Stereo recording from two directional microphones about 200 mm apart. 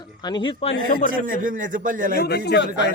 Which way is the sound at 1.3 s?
40° right (ahead or behind).